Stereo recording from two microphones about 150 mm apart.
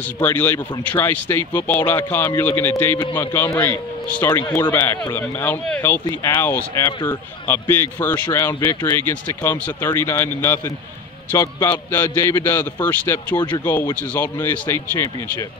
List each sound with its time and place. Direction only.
0.2 s a man's voice: 10° left (ahead or behind)